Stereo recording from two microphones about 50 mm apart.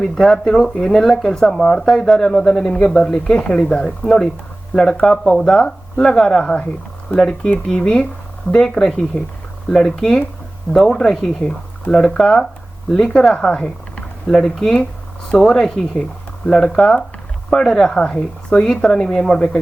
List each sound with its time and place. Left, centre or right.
0.0 s speech: centre
5.5 s speech: centre